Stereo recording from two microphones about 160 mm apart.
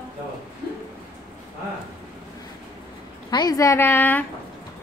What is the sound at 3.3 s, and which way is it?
Speech, 25° left (ahead or behind).